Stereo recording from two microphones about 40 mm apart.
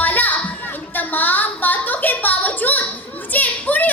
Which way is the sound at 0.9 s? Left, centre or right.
Left.